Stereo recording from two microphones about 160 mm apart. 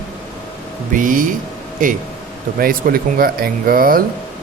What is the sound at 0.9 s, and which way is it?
Speech, 55° right (ahead or behind).